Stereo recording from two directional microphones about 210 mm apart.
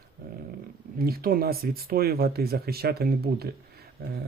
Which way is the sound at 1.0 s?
45° right (ahead or behind).